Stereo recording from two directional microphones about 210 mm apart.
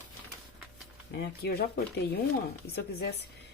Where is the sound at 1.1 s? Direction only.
50° left (ahead or behind).